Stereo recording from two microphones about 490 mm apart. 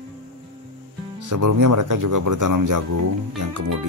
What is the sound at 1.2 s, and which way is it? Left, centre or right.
Speech, right.